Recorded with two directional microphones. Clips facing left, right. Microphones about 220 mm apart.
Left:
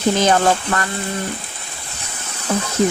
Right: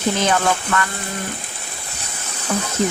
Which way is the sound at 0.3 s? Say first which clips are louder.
Left 3 dB; 35° left (ahead or behind).